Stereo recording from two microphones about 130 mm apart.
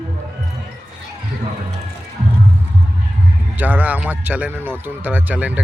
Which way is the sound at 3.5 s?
15° right (ahead or behind).